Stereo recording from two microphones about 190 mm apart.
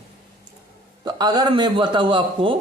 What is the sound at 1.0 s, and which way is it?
A man's voice, 20° right (ahead or behind).